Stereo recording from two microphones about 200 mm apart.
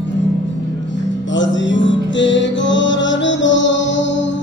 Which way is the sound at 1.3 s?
65° left (ahead or behind).